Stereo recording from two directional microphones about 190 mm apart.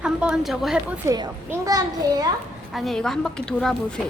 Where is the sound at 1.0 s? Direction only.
20° right (ahead or behind).